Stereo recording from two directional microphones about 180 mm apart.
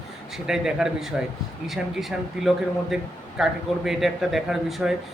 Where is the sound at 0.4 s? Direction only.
5° right (ahead or behind).